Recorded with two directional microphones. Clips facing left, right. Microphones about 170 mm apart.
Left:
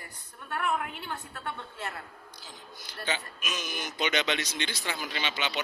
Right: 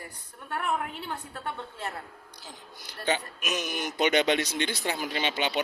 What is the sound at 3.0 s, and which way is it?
Speech, 40° right (ahead or behind).